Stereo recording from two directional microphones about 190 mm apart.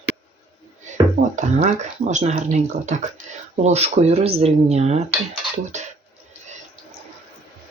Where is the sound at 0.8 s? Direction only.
40° right (ahead or behind).